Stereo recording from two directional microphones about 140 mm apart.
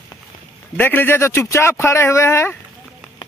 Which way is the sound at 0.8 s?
15° left (ahead or behind).